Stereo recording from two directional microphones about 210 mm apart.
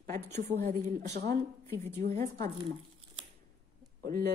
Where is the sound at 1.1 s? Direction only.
55° right (ahead or behind).